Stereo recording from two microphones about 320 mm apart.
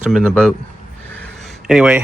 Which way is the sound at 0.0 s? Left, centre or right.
Centre.